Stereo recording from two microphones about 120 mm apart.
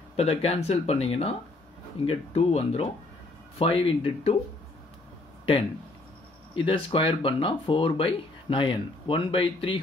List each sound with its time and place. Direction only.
0.1 s speech: 55° left (ahead or behind)
6.5 s speech: 45° left (ahead or behind)